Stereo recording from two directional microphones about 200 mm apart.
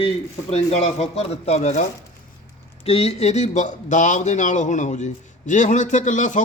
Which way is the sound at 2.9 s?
30° left (ahead or behind).